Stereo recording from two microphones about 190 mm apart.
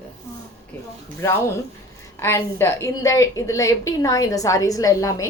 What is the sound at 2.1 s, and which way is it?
A woman's voice, 15° left (ahead or behind).